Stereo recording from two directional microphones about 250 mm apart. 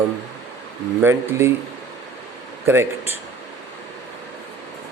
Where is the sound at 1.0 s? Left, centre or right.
Centre.